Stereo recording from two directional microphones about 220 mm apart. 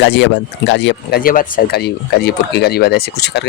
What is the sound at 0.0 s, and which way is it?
Speech, 55° left (ahead or behind).